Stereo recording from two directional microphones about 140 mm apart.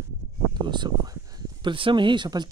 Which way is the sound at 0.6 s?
30° right (ahead or behind).